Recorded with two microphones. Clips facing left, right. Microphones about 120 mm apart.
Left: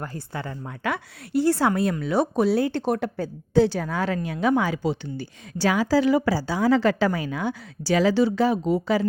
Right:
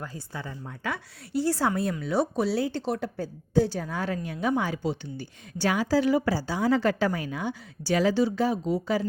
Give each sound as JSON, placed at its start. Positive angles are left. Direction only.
{"t": 0.0, "sound": "speech", "side_deg": 65}
{"t": 3.2, "sound": "a woman's voice", "side_deg": 90}